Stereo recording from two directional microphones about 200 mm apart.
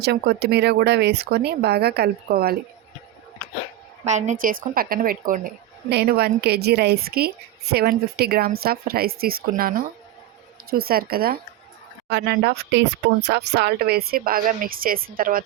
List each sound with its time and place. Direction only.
0.0 s speech: 55° right (ahead or behind)
4.0 s speech: 35° right (ahead or behind)
5.9 s speech: 55° right (ahead or behind)